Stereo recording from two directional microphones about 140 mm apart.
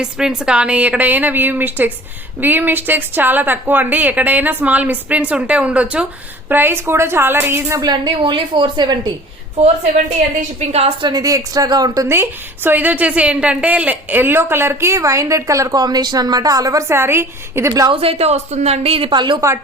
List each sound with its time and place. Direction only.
0.0 s a woman's voice: 5° right (ahead or behind); by 9.1 s 30° right (ahead or behind)
10.6 s speech: 50° right (ahead or behind)
11.1 s a woman's voice: 25° right (ahead or behind)
17.8 s speech: 45° right (ahead or behind)